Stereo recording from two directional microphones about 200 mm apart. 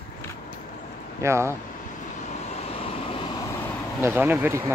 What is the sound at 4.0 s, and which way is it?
Speech, 10° right (ahead or behind).